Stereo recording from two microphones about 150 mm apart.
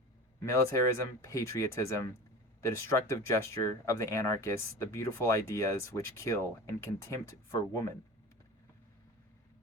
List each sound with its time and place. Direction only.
0.5 s speech: 20° left (ahead or behind)